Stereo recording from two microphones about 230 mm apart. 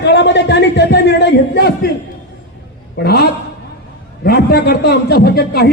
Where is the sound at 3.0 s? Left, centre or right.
Left.